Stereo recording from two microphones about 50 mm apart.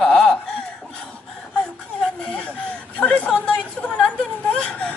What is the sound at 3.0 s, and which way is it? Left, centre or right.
Chatter, left.